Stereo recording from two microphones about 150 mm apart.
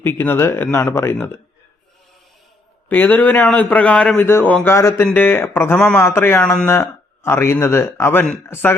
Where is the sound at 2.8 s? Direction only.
10° left (ahead or behind).